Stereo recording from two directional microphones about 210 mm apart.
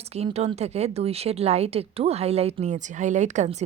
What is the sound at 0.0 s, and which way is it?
Speech, 30° right (ahead or behind).